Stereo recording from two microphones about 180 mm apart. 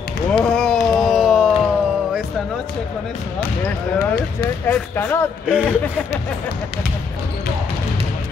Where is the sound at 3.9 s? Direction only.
55° left (ahead or behind).